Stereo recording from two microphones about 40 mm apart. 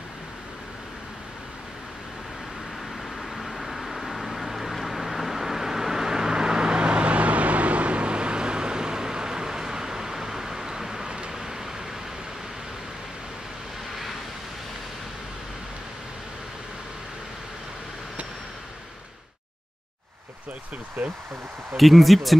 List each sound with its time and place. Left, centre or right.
3.2 s vehicle: centre
11.1 s vehicle: right
11.3 s a sound: centre
21.0 s speech: right
21.7 s speech: centre